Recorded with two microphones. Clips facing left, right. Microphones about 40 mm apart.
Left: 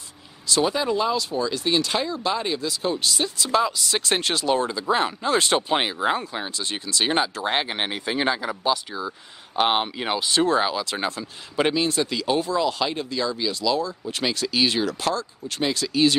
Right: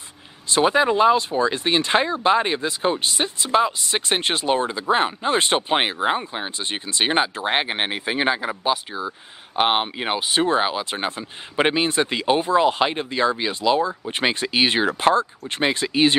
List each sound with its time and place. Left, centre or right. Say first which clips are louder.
0.5 s speech: right 4 dB; right